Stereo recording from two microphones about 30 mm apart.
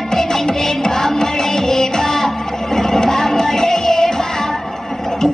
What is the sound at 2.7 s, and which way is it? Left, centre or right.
Music, centre.